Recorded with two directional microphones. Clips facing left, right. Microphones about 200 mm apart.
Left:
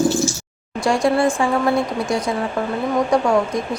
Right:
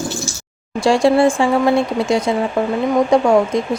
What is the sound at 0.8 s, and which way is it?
Speech, 30° right (ahead or behind).